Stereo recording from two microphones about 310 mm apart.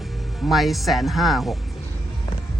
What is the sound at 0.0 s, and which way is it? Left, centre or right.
Speech, centre.